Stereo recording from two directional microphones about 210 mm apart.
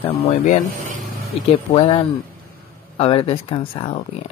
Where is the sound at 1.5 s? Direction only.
30° left (ahead or behind).